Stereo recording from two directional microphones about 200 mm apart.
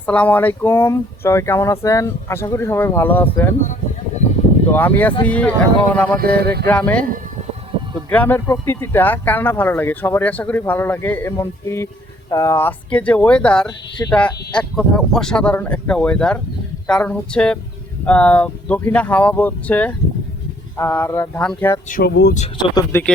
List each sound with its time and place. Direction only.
0.0 s speech: 5° left (ahead or behind)
4.7 s speech: 10° left (ahead or behind)
6.2 s speech: 50° right (ahead or behind)
6.7 s speech: 5° left (ahead or behind)
8.1 s speech: 10° left (ahead or behind)
21.8 s speech: 45° left (ahead or behind)
22.5 s speech: 15° left (ahead or behind)